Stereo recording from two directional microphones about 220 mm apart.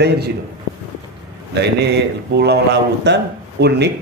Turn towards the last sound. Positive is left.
turn(degrees=-50)  # may be behind; listen again after turning